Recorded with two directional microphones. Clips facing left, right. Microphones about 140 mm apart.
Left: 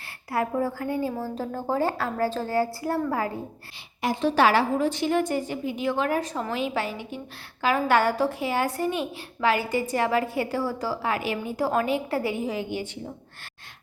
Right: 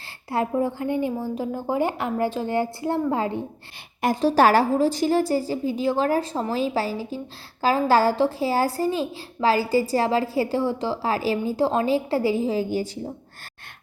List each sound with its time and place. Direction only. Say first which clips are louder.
0.3 s a woman's voice: right 2 dB; 20° right (ahead or behind)
4.0 s a child's voice: right 3 dB; 40° right (ahead or behind)